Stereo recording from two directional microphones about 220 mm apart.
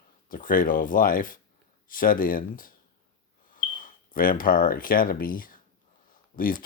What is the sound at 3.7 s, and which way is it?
Speech, 40° left (ahead or behind).